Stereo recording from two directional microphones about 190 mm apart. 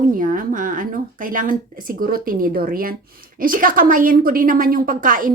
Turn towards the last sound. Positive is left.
turn(degrees=-45)  # may be behind; listen again after turning